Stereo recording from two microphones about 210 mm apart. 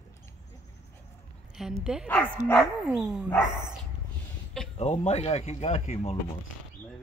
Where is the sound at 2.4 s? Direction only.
35° right (ahead or behind).